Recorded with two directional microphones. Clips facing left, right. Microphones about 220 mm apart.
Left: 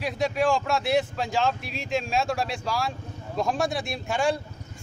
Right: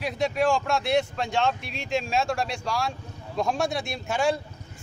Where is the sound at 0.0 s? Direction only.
Centre (ahead or behind).